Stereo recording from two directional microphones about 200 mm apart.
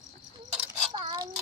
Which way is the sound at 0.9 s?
20° right (ahead or behind).